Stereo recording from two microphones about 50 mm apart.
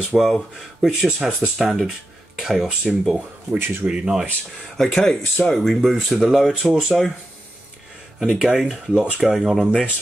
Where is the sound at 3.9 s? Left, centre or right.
Centre.